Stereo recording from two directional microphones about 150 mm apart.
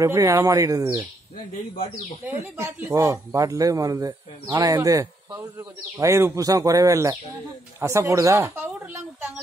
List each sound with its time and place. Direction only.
0.0 s speech: 20° right (ahead or behind)
2.2 s speech: 15° right (ahead or behind)